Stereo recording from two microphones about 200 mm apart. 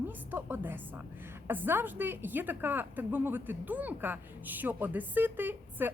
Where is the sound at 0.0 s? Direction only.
10° right (ahead or behind).